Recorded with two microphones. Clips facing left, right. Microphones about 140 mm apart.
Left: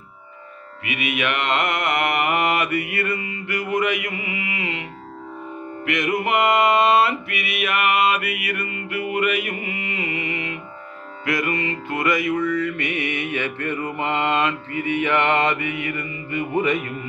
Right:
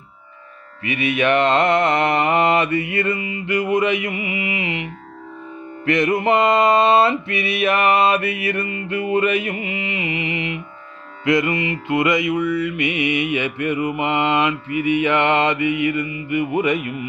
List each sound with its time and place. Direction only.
0.8 s music: 30° right (ahead or behind)
5.9 s music: 30° right (ahead or behind)
11.2 s mantra: 20° right (ahead or behind)